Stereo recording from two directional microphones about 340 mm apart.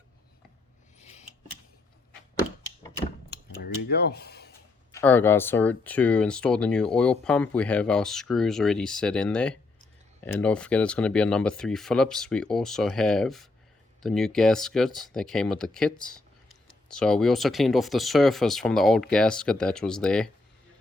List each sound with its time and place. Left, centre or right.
3.6 s speech: left
4.9 s speech: centre